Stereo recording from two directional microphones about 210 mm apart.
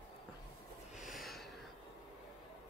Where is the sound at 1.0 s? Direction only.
Centre (ahead or behind).